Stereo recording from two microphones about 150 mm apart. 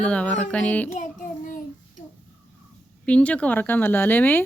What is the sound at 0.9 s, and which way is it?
Child singing, 55° left (ahead or behind).